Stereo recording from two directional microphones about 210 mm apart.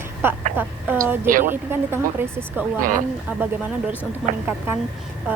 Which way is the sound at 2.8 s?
40° right (ahead or behind).